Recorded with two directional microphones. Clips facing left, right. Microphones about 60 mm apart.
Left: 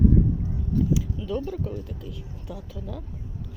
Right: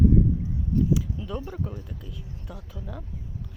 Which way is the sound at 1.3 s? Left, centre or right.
Centre.